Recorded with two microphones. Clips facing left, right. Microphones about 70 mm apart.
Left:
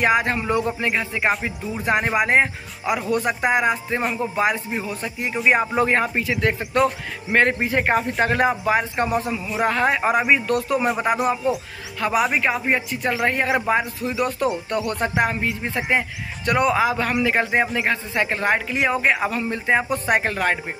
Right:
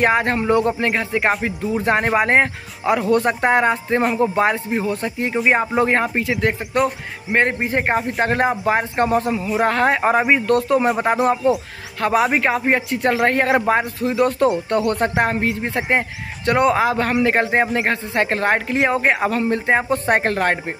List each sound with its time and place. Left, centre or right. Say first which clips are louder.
0.0 s speech: right 2 dB; right
5.8 s speech: right 2 dB; right
12.3 s speech: right 3 dB; right